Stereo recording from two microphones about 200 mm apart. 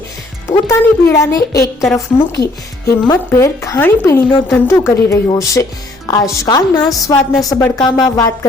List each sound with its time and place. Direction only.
0.4 s speech: 15° left (ahead or behind)
2.3 s a woman's voice: 55° left (ahead or behind)
3.1 s speech: 15° left (ahead or behind)